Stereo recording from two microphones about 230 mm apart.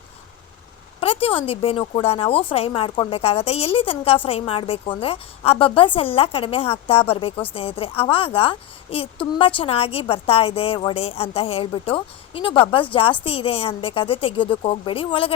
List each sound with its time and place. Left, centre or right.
0.9 s a woman's voice: left